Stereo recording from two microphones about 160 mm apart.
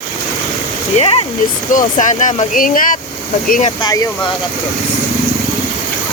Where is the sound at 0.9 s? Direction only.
40° left (ahead or behind).